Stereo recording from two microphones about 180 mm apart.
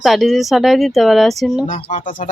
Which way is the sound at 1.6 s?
40° left (ahead or behind).